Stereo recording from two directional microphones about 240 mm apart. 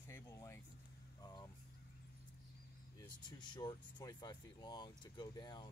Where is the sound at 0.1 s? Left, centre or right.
Centre.